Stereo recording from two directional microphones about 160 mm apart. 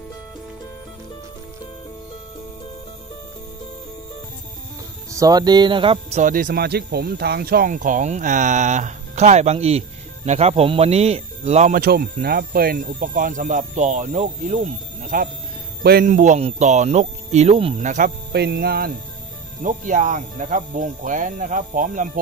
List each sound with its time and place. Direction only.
5.1 s speech: 25° right (ahead or behind); by 6.3 s 45° right (ahead or behind)
6.3 s speech: 70° right (ahead or behind); by 11.8 s 45° right (ahead or behind)
11.8 s speech: 70° right (ahead or behind)
15.8 s speech: 75° right (ahead or behind)
16.1 s speech: 50° right (ahead or behind)
17.8 s speech: 55° right (ahead or behind)
18.3 s speech: 90° right
19.6 s speech: 55° right (ahead or behind)